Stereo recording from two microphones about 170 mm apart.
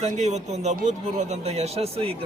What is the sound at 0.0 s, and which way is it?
A man's voice, 40° right (ahead or behind).